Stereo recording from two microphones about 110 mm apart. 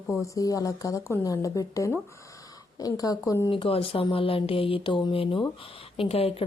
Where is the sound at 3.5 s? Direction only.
55° left (ahead or behind).